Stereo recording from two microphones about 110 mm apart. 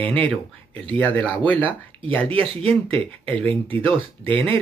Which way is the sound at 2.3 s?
60° right (ahead or behind).